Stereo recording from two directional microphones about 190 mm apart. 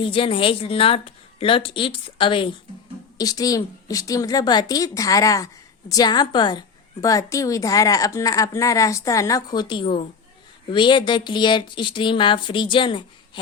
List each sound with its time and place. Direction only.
0.0 s a woman's voice: 30° left (ahead or behind)